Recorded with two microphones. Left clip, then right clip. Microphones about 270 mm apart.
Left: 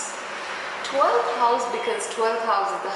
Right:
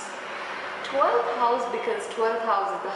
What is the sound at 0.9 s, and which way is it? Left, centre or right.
A woman's voice, centre.